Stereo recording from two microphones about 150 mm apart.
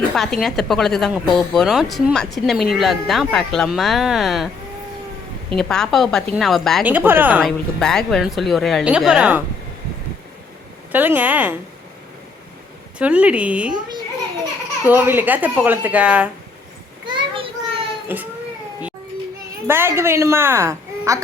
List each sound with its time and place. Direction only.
0.1 s speech: centre (ahead or behind)
5.5 s speech: 5° left (ahead or behind)
6.8 s a woman's voice: 10° right (ahead or behind)
7.4 s speech: 5° left (ahead or behind)
10.9 s a woman's voice: 10° right (ahead or behind)
13.0 s a woman's voice: 10° right (ahead or behind)
14.8 s a woman's voice: 15° right (ahead or behind)
17.2 s a sound: 35° right (ahead or behind)
18.1 s a woman's voice: 15° right (ahead or behind)
19.6 s a woman's voice: 15° right (ahead or behind)